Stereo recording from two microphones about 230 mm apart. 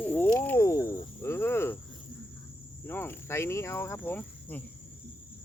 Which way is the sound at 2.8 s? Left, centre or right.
Centre.